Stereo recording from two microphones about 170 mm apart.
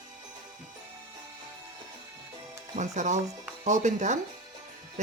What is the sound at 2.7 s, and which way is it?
Speech, 45° right (ahead or behind).